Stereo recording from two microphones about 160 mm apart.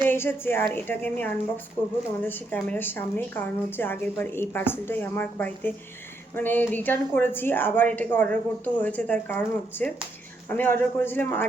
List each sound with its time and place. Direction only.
0.1 s a woman's voice: 15° left (ahead or behind)